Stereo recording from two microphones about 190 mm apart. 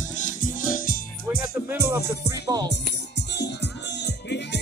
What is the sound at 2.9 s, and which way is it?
Music, 65° left (ahead or behind).